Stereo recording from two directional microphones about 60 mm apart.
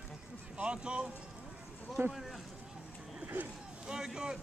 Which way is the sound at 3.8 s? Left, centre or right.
Centre.